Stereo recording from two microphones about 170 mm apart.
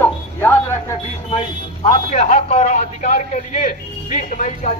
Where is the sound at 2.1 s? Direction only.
45° left (ahead or behind).